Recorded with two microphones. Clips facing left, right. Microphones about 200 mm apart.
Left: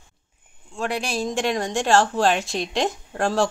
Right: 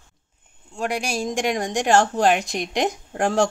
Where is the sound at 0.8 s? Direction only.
10° right (ahead or behind).